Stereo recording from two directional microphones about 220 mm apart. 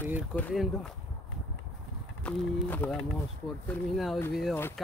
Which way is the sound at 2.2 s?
5° left (ahead or behind).